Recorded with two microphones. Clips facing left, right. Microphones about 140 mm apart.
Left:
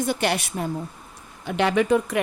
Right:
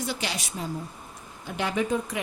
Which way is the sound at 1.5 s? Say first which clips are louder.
Left 7 dB; 70° left (ahead or behind).